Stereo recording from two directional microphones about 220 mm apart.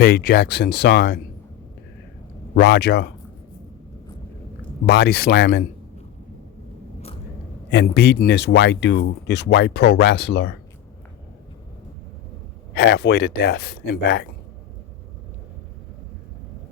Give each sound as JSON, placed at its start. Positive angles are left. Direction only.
{"t": 0.0, "sound": "speech", "side_deg": 45}
{"t": 2.6, "sound": "speech", "side_deg": 50}
{"t": 4.9, "sound": "speech", "side_deg": 45}
{"t": 7.7, "sound": "speech", "side_deg": 45}
{"t": 12.7, "sound": "speech", "side_deg": 50}